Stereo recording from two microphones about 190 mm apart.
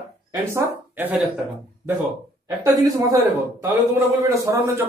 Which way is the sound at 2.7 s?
20° right (ahead or behind).